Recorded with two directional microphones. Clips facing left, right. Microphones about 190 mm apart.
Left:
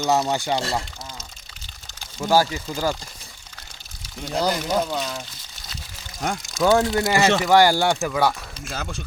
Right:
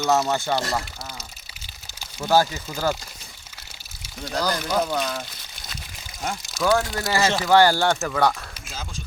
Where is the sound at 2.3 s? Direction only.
10° left (ahead or behind).